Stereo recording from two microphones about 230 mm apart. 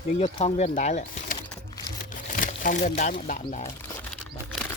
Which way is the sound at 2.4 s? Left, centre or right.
Left.